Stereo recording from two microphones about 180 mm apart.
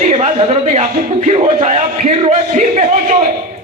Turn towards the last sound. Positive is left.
turn(degrees=-40)  # may be behind; listen again after turning